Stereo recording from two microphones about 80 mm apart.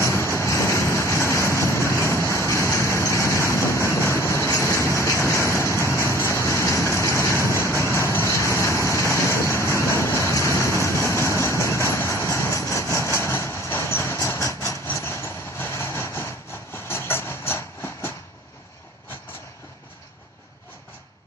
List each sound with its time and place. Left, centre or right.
0.0 s vehicle: left